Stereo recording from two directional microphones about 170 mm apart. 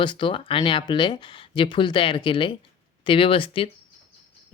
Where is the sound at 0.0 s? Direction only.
30° left (ahead or behind).